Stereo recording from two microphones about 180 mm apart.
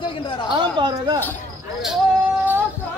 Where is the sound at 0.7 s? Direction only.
25° right (ahead or behind).